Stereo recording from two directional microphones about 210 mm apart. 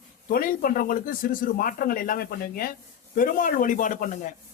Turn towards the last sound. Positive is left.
turn(degrees=35)  # may be behind; listen again after turning